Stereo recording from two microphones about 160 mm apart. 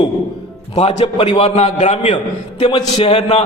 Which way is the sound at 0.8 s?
45° left (ahead or behind).